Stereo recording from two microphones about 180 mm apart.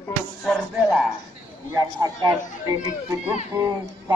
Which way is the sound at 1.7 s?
20° right (ahead or behind).